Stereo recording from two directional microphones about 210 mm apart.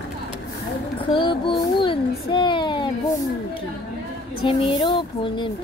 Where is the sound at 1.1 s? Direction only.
25° left (ahead or behind).